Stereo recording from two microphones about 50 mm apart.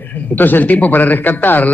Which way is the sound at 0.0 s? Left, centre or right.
Left.